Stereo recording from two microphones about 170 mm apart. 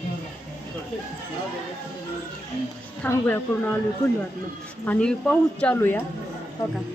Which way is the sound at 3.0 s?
10° left (ahead or behind).